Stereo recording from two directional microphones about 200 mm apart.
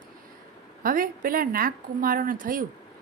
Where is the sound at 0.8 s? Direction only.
45° right (ahead or behind).